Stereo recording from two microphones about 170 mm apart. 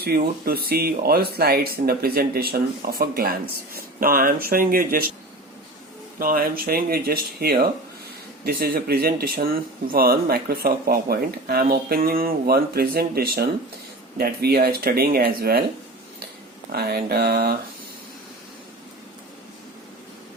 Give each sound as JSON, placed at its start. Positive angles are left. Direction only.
{"t": 0.0, "sound": "speech", "side_deg": -65}
{"t": 6.1, "sound": "speech", "side_deg": -60}
{"t": 16.7, "sound": "speech", "side_deg": -65}